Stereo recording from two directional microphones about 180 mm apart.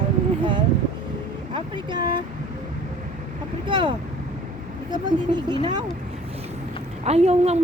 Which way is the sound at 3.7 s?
25° right (ahead or behind).